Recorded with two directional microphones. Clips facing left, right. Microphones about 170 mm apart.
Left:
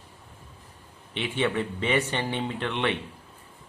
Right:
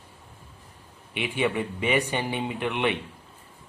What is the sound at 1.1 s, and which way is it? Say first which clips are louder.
Speech: even; 10° right (ahead or behind).